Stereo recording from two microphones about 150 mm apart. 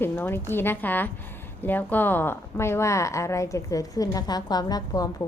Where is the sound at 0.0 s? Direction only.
15° left (ahead or behind).